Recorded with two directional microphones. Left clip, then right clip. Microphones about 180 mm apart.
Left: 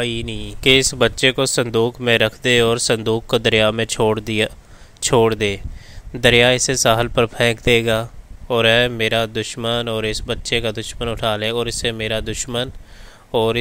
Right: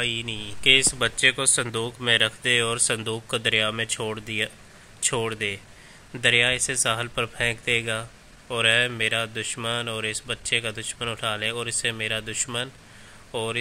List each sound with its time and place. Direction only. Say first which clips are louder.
0.0 s speech: left 4 dB; 45° left (ahead or behind)